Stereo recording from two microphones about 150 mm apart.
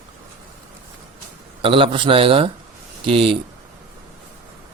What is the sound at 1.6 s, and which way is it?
Speech, 35° right (ahead or behind).